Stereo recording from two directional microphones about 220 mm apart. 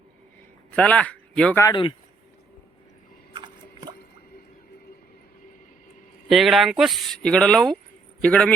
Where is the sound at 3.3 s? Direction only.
20° right (ahead or behind).